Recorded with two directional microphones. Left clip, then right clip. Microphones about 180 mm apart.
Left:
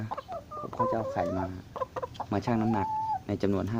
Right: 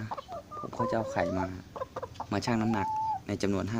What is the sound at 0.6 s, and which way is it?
Telephone dialing, 5° left (ahead or behind).